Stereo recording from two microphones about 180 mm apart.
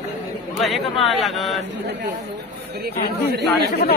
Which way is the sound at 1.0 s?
Centre (ahead or behind).